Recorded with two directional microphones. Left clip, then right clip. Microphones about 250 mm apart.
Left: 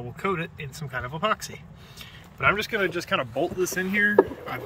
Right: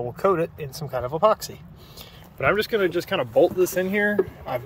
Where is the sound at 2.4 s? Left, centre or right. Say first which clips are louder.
Right 2 dB; centre.